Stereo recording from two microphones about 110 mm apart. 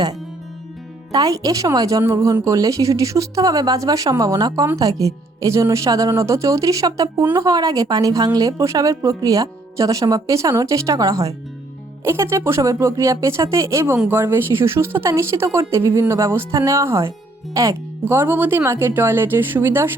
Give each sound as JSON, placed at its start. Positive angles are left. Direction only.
{"t": 1.1, "sound": "a woman's voice", "side_deg": -35}
{"t": 18.0, "sound": "speech", "side_deg": -20}